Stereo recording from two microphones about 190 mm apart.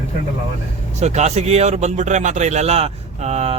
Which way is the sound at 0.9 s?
35° right (ahead or behind).